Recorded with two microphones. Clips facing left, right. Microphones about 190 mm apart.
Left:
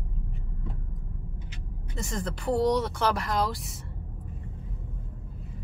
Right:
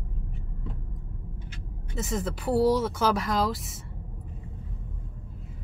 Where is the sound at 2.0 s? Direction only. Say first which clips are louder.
Right 3 dB; 5° right (ahead or behind).